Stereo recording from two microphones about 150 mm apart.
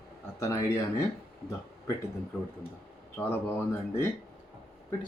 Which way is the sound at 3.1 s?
15° left (ahead or behind).